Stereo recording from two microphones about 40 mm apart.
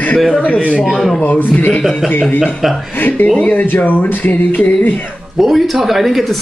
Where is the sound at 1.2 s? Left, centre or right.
Left.